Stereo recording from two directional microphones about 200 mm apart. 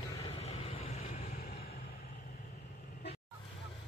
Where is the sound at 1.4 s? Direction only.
50° left (ahead or behind).